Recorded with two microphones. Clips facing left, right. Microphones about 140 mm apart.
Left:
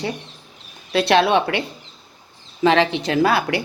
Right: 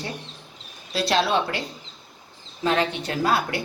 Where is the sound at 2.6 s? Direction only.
90° left.